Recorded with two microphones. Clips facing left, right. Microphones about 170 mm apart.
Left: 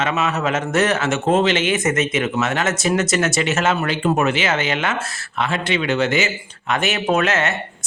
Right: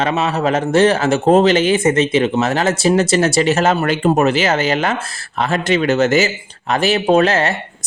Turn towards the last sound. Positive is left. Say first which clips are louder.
# right 5 dB
turn(degrees=-35)  # may be behind; listen again after turning